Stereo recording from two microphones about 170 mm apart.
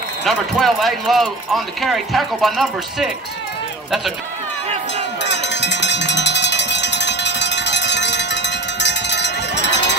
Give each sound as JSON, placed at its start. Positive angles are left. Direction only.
{"t": 0.2, "sound": "a man's voice", "side_deg": 0}
{"t": 5.2, "sound": "cowbell", "side_deg": 90}